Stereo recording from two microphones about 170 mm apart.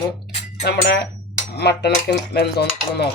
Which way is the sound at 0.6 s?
75° left (ahead or behind).